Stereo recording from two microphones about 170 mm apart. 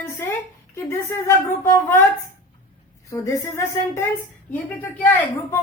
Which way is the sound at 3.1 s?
15° left (ahead or behind).